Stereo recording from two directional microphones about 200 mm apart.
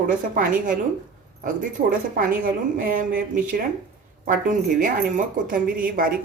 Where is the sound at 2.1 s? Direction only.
45° right (ahead or behind).